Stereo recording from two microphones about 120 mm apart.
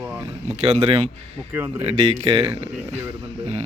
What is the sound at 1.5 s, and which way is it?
Speech, 15° right (ahead or behind).